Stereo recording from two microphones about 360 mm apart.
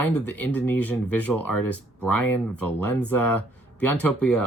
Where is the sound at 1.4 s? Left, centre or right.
Left.